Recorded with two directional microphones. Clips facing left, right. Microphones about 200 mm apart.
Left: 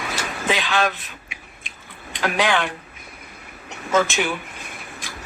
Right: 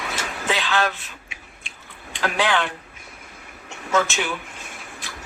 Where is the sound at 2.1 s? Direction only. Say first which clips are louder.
Left 1 dB; 15° left (ahead or behind).